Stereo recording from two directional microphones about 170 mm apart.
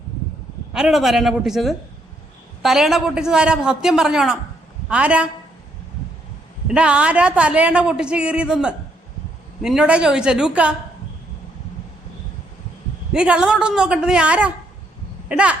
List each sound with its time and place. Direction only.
0.7 s a man's voice: 5° right (ahead or behind)
6.7 s a woman's voice: 5° right (ahead or behind)
13.1 s a man's voice: 5° right (ahead or behind)